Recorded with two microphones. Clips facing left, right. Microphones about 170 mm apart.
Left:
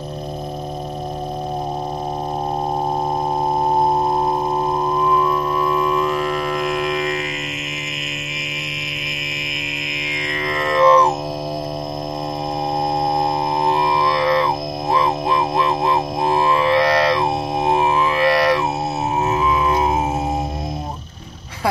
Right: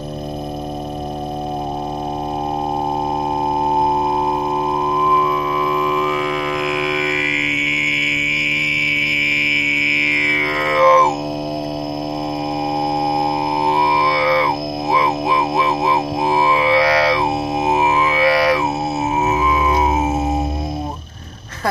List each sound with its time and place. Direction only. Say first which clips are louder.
4.9 s music: even; 5° right (ahead or behind)
7.9 s mantra: right 5 dB; 5° right (ahead or behind)
13.7 s music: right 1 dB; 5° right (ahead or behind)